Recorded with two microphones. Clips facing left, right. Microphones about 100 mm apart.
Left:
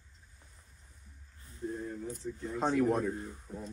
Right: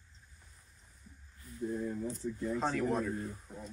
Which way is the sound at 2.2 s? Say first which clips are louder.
Left 1 dB; 5° left (ahead or behind).